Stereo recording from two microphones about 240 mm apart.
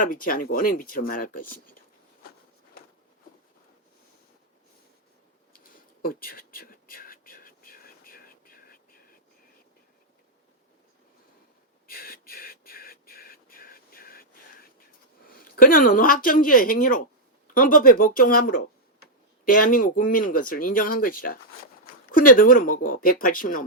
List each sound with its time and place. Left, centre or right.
0.0 s speech: left
1.5 s speech: left
5.5 s whispering: left
11.9 s a sound: left
15.3 s speech: left